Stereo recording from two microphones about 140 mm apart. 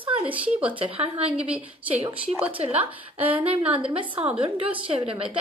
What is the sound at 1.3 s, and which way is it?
Speech, 10° right (ahead or behind).